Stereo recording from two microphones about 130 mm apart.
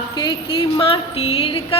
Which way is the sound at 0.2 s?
40° left (ahead or behind).